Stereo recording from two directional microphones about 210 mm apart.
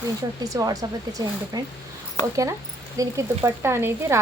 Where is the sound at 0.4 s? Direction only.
15° right (ahead or behind).